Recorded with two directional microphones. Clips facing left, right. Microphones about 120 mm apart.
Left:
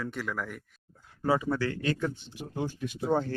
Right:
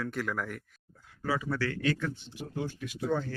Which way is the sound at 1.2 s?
25° left (ahead or behind).